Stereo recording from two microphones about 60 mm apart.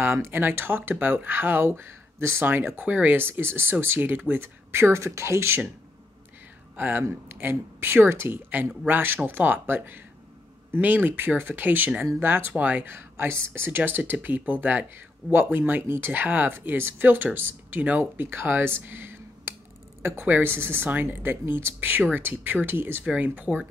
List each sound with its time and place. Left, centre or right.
0.0 s speech: right
2.7 s speech: right
6.8 s speech: right
20.2 s speech: right
21.7 s speech: right
23.0 s speech: right